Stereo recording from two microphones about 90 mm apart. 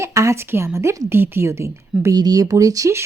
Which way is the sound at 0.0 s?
35° right (ahead or behind).